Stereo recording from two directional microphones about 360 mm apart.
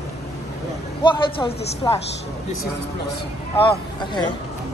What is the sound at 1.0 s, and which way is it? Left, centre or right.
Speech, centre.